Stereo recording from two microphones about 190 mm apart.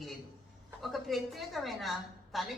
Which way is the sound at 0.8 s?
Centre (ahead or behind).